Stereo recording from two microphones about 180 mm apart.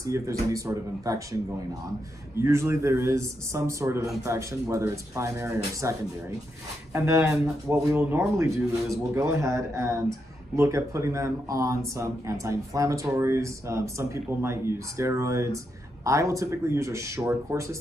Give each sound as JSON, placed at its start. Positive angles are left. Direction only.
{"t": 0.0, "sound": "speech", "side_deg": -20}
{"t": 2.3, "sound": "speech", "side_deg": -15}